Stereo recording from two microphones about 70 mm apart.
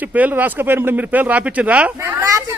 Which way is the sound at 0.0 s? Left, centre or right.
Right.